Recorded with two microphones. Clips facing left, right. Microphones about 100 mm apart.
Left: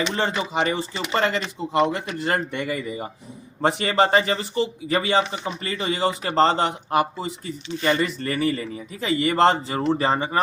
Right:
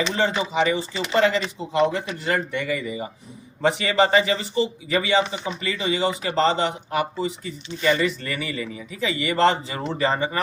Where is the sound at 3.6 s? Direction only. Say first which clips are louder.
Even; 40° left (ahead or behind).